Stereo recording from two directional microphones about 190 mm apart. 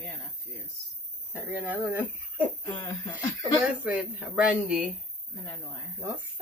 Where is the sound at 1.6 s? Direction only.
10° right (ahead or behind).